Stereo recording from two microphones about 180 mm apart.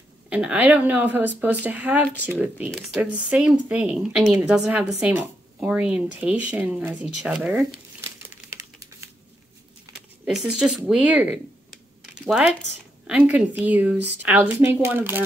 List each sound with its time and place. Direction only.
0.3 s speech: 5° right (ahead or behind)
8.3 s typing: 15° right (ahead or behind)
10.2 s speech: 5° right (ahead or behind)